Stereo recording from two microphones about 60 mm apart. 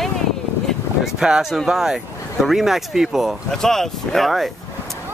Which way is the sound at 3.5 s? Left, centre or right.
Centre.